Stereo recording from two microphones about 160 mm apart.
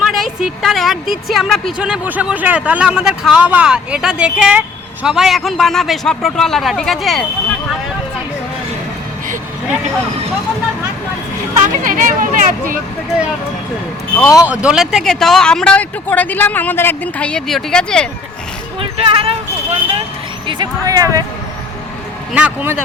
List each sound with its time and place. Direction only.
0.0 s a woman's voice: centre (ahead or behind)
11.8 s speech: 55° right (ahead or behind)
14.3 s speech: 5° right (ahead or behind)
18.8 s speech: 35° right (ahead or behind)
20.5 s speech: 25° right (ahead or behind)
22.3 s speech: 10° right (ahead or behind)